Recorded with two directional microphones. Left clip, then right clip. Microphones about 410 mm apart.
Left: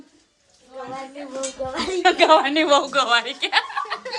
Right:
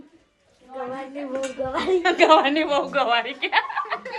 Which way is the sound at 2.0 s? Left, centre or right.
Centre.